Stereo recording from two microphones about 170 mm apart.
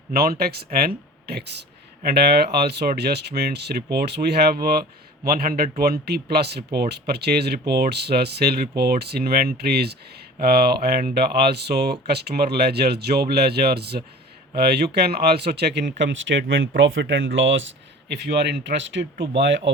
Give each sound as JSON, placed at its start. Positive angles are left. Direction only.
{"t": 0.1, "sound": "speech", "side_deg": -65}